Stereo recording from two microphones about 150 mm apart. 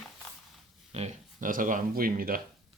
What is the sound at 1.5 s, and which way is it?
Speech, 65° right (ahead or behind).